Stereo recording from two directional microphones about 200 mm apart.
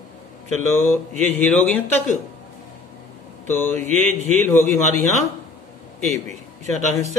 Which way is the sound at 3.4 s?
10° left (ahead or behind).